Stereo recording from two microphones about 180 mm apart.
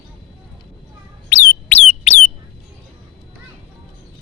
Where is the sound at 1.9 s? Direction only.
35° left (ahead or behind).